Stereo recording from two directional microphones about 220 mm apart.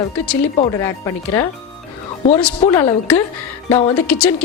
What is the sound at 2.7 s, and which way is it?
Speech, 15° left (ahead or behind).